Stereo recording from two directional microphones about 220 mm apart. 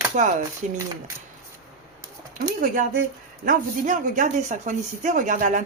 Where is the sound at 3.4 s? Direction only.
35° right (ahead or behind).